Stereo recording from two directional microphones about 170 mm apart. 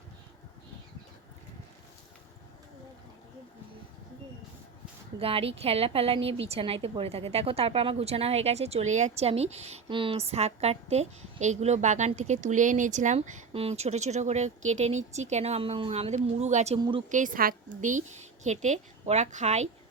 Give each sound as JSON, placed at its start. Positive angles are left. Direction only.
{"t": 5.2, "sound": "a woman's voice", "side_deg": -35}
{"t": 16.7, "sound": "speech", "side_deg": -30}
{"t": 17.1, "sound": "a woman's voice", "side_deg": -50}